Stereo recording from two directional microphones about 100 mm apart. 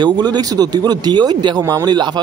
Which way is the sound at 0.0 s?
45° right (ahead or behind).